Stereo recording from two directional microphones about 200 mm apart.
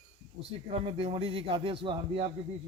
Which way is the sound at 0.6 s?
30° right (ahead or behind).